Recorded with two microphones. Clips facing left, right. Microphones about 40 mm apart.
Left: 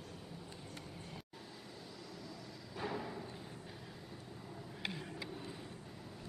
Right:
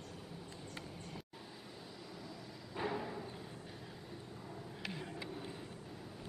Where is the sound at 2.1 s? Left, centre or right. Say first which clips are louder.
Even; centre.